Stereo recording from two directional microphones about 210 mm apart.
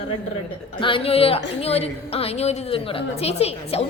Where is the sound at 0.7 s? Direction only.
25° left (ahead or behind).